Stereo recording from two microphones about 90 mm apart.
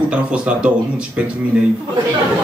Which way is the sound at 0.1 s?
10° right (ahead or behind).